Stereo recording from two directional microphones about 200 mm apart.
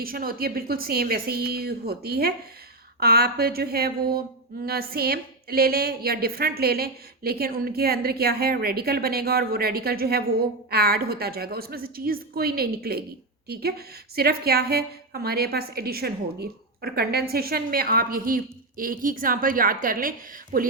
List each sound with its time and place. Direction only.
0.0 s a woman's voice: 45° right (ahead or behind)